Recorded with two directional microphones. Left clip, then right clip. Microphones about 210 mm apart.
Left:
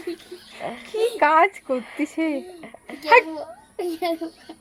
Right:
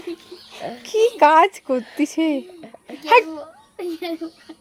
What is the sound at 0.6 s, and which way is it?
Speech, 5° right (ahead or behind).